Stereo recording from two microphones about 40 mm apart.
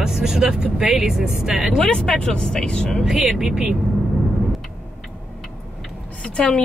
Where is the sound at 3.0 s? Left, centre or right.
Centre.